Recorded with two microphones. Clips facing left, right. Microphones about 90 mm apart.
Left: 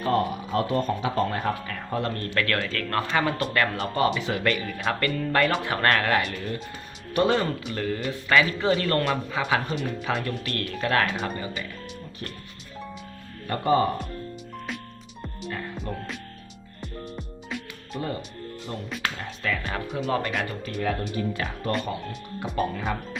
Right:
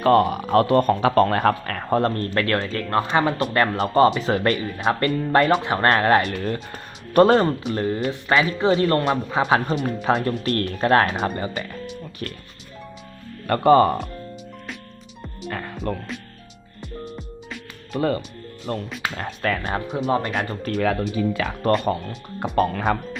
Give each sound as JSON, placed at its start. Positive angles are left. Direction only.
{"t": 0.0, "sound": "speech", "side_deg": -70}
{"t": 6.3, "sound": "speech", "side_deg": -60}
{"t": 13.5, "sound": "speech", "side_deg": -65}
{"t": 15.4, "sound": "music", "side_deg": -65}
{"t": 16.8, "sound": "music", "side_deg": 0}
{"t": 17.9, "sound": "speech", "side_deg": -70}
{"t": 19.7, "sound": "speech", "side_deg": -25}
{"t": 20.6, "sound": "speech", "side_deg": -65}
{"t": 21.7, "sound": "speech", "side_deg": -50}